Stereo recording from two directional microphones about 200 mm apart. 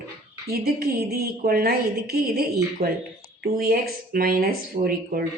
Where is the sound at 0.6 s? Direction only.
50° right (ahead or behind).